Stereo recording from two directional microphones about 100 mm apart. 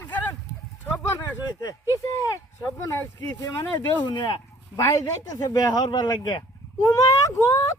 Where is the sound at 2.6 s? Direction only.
30° left (ahead or behind).